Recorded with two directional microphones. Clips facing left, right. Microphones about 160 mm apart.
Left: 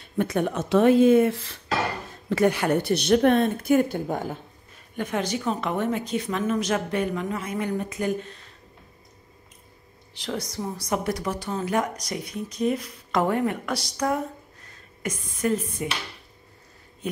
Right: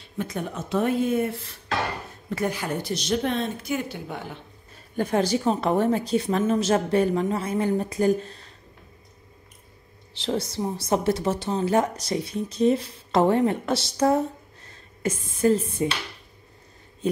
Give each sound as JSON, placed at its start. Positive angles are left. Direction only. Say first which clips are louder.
{"t": 0.0, "sound": "speech", "louder": "left 6 dB", "side_deg": 65}
{"t": 4.9, "sound": "a woman's voice", "louder": "right 4 dB", "side_deg": -35}
{"t": 10.1, "sound": "speech", "louder": "right 4 dB", "side_deg": -25}
{"t": 17.0, "sound": "a woman's voice", "louder": "right 6 dB", "side_deg": -30}